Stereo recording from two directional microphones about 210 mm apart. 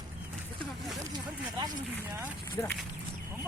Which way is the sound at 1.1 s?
20° right (ahead or behind).